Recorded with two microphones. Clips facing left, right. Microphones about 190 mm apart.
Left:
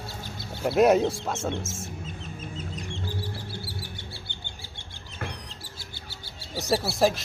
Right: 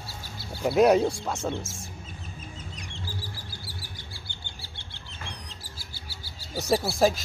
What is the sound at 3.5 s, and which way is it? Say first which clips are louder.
Bird: left 6 dB; 65° left (ahead or behind).